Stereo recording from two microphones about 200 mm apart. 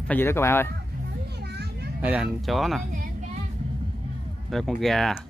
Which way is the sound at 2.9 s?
45° right (ahead or behind).